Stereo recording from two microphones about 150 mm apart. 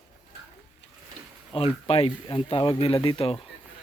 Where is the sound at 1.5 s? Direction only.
40° left (ahead or behind).